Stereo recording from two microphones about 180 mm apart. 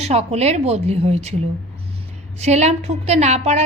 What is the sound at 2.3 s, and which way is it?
A woman's voice, 40° right (ahead or behind).